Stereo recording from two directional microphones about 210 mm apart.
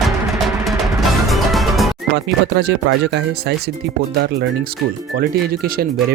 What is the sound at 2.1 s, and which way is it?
Speech, 50° right (ahead or behind).